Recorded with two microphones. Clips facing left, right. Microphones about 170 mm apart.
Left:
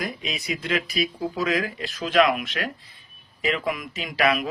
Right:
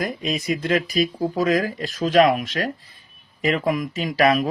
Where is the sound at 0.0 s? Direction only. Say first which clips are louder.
Right 6 dB; 45° right (ahead or behind).